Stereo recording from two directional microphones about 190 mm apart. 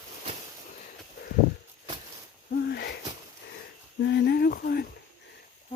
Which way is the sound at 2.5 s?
60° left (ahead or behind).